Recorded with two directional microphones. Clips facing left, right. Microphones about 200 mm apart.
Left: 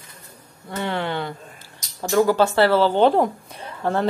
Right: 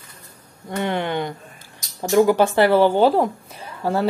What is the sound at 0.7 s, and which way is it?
Speech, 15° right (ahead or behind).